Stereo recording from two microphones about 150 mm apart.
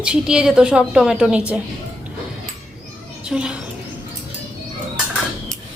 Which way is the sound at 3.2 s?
5° right (ahead or behind).